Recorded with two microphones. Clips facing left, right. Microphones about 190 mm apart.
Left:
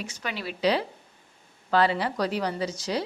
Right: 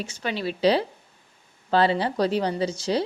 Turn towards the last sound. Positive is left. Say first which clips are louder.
# right 4 dB
turn(degrees=-30)  # may be behind; listen again after turning